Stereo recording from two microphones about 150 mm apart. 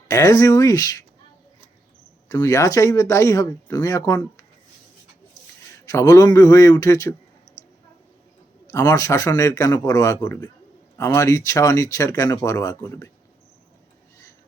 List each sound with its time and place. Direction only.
0.1 s speech: 20° left (ahead or behind)
2.3 s speech: 20° left (ahead or behind)
5.8 s speech: 20° left (ahead or behind)
7.5 s a sound: 55° left (ahead or behind)
8.6 s speech: 20° left (ahead or behind)